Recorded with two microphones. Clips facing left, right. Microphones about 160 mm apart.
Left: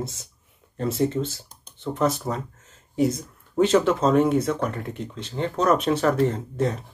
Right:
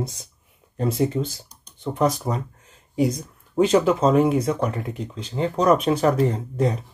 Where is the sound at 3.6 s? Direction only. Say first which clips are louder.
Right 1 dB; 10° right (ahead or behind).